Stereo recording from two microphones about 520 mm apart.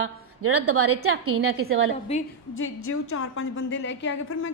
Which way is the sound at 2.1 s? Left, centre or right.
Centre.